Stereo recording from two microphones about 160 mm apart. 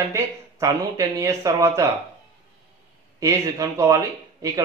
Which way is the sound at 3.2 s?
20° right (ahead or behind).